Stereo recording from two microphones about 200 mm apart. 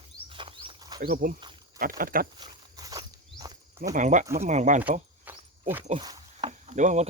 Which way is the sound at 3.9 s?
40° right (ahead or behind).